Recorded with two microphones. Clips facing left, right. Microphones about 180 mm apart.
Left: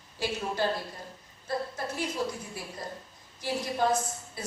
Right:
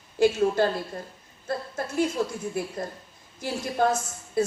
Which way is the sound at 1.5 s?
50° right (ahead or behind).